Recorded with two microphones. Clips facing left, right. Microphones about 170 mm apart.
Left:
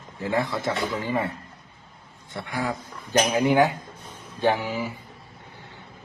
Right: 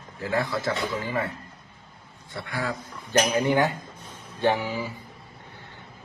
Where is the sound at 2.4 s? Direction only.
15° left (ahead or behind).